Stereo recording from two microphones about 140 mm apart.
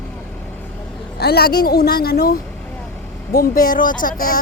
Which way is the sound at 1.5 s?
90° left.